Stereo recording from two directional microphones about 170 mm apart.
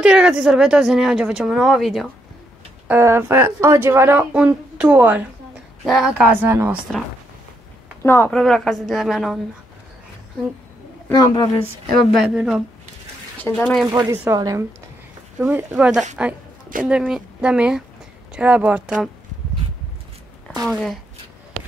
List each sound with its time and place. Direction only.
0.0 s speech: 5° right (ahead or behind)
2.9 s speech: 15° right (ahead or behind)
8.0 s speech: 15° left (ahead or behind)
8.3 s speech: 5° left (ahead or behind)
11.1 s a woman's voice: 25° left (ahead or behind)
12.1 s speech: centre (ahead or behind)
13.4 s speech: 5° left (ahead or behind)
13.8 s speech: 20° right (ahead or behind)
15.3 s speech: 10° right (ahead or behind)
20.6 s speech: centre (ahead or behind)